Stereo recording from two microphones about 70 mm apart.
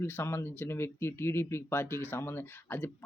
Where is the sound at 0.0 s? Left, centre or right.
Left.